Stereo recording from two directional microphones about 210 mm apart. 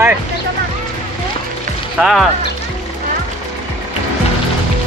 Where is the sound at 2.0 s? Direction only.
Centre (ahead or behind).